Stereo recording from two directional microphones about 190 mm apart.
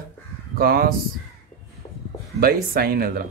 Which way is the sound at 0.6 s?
50° right (ahead or behind).